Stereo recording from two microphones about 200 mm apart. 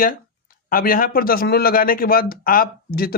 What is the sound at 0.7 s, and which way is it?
A man's voice, 45° left (ahead or behind).